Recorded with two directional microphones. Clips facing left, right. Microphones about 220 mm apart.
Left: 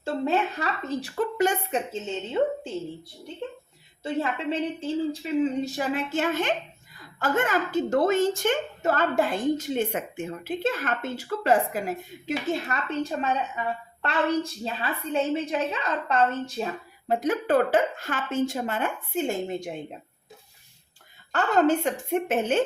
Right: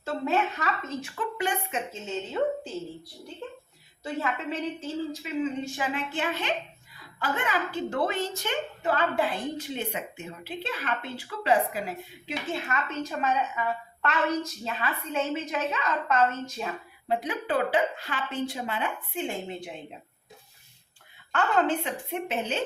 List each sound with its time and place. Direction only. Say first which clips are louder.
0.0 s a woman's voice: left 2 dB; 35° left (ahead or behind)
1.7 s a woman's voice: left 4 dB; 30° left (ahead or behind)
4.0 s a woman's voice: left 4 dB; 30° left (ahead or behind)
17.1 s a woman's voice: left 5 dB; 45° left (ahead or behind)
21.3 s a woman's voice: left 4 dB; 40° left (ahead or behind)